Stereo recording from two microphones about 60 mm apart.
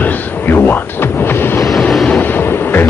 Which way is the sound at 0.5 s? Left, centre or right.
Left.